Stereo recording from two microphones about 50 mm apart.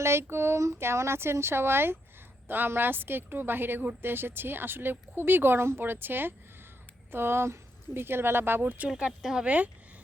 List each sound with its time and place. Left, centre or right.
0.0 s speech: right
0.8 s speech: right
9.4 s speech: right